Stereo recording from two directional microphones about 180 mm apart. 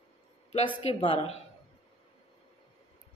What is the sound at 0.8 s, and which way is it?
Speech, 35° left (ahead or behind).